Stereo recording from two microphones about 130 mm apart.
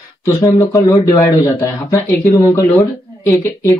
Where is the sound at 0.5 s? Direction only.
25° left (ahead or behind).